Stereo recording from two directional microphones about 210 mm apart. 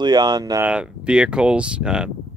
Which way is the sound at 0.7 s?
5° right (ahead or behind).